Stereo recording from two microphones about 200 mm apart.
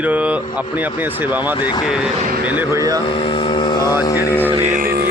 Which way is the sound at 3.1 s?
25° left (ahead or behind).